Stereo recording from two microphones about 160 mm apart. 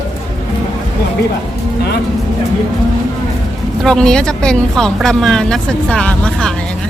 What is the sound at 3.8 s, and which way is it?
Speech, 5° left (ahead or behind).